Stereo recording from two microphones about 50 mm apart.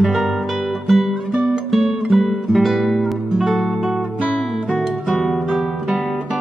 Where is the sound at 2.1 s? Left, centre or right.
Centre.